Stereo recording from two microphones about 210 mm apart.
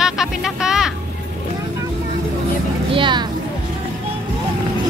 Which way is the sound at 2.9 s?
20° right (ahead or behind).